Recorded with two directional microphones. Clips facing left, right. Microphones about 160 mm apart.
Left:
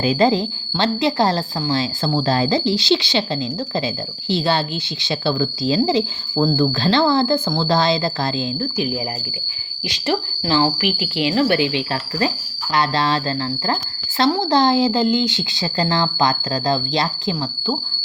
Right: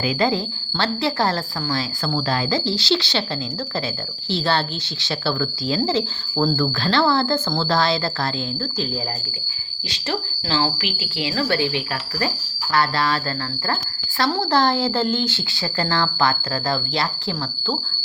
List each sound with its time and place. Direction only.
0.0 s a woman's voice: 25° left (ahead or behind)
4.3 s speech: 15° left (ahead or behind)
9.9 s a woman's voice: 15° left (ahead or behind)
14.2 s speech: 15° left (ahead or behind)